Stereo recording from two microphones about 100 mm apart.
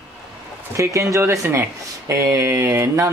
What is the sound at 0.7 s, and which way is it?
Speech, 30° right (ahead or behind).